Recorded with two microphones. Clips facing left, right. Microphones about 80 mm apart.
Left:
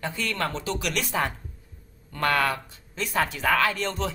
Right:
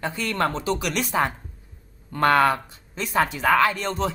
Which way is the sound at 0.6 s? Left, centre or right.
Centre.